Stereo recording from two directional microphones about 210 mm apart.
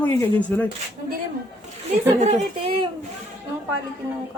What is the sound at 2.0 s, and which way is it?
Speech, 30° right (ahead or behind).